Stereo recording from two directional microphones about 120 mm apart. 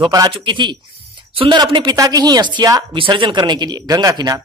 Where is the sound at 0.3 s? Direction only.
45° right (ahead or behind).